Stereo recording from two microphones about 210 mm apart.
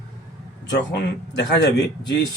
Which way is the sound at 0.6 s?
55° left (ahead or behind).